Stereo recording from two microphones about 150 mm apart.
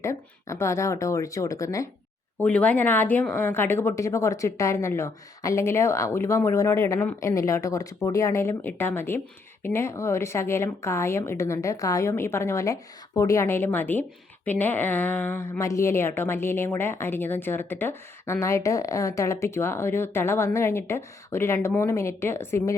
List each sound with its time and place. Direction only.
0.0 s speech: 20° left (ahead or behind)
2.4 s speech: 10° left (ahead or behind)